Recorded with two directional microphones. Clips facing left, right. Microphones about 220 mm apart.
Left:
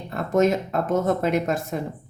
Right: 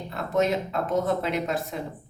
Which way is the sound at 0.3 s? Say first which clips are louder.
Left 4 dB; 45° left (ahead or behind).